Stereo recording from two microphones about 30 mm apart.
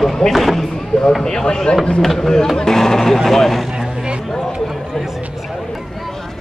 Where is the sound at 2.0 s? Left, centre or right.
Centre.